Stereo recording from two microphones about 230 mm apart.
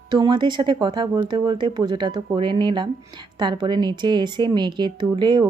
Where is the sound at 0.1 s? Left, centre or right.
Centre.